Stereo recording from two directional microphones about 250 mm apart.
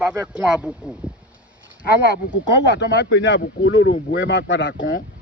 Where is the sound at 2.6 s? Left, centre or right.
Left.